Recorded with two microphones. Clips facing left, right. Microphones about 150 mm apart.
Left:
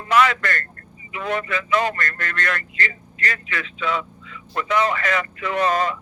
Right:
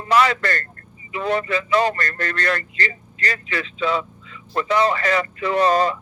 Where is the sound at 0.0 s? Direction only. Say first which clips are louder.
Right 1 dB; 35° right (ahead or behind).